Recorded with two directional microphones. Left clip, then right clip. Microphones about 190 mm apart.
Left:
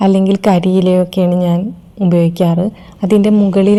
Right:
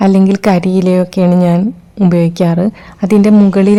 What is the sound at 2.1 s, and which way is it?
A woman's voice, 10° right (ahead or behind).